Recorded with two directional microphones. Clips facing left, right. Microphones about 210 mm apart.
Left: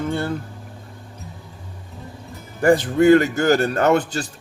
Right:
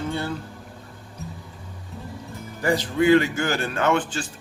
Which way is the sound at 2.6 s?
50° left (ahead or behind).